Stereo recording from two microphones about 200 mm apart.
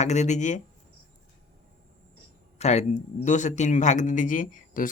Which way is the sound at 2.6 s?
35° left (ahead or behind).